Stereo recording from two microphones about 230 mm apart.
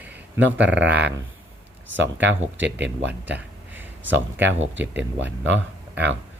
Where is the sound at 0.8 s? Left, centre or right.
Right.